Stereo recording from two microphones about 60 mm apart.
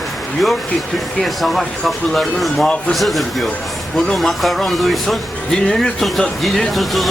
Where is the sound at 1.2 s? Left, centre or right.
Centre.